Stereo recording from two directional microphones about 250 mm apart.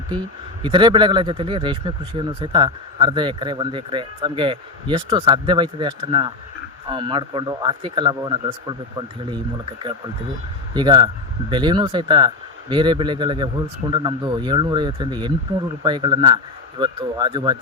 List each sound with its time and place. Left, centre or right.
0.6 s speech: centre
10.8 s speech: centre